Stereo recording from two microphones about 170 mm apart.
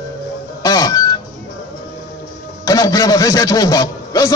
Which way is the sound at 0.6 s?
20° left (ahead or behind).